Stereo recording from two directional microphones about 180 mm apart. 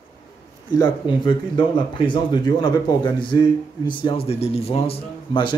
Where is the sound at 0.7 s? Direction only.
25° left (ahead or behind).